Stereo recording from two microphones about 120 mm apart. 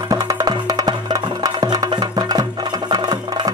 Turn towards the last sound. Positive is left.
turn(degrees=-35)  # may be behind; listen again after turning